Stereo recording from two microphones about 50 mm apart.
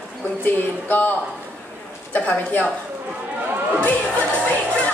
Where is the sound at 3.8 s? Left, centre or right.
Left.